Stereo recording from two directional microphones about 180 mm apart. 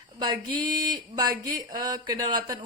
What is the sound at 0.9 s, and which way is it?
A woman's voice, 25° right (ahead or behind).